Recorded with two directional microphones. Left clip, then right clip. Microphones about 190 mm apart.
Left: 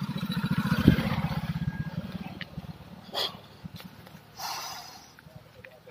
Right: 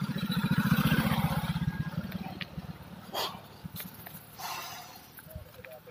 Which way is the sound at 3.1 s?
20° left (ahead or behind).